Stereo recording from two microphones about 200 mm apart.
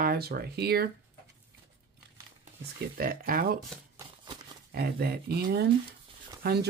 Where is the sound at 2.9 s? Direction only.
45° right (ahead or behind).